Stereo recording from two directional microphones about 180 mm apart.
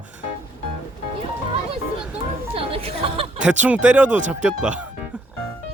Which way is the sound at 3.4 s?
5° right (ahead or behind).